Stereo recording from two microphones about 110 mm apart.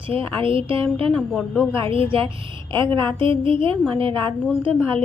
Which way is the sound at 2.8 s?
50° right (ahead or behind).